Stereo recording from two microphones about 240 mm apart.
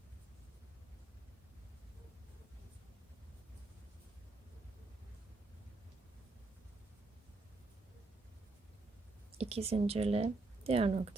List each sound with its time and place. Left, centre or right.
9.4 s speech: right